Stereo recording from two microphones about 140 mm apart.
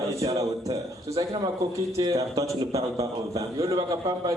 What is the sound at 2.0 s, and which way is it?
Speech, 25° right (ahead or behind).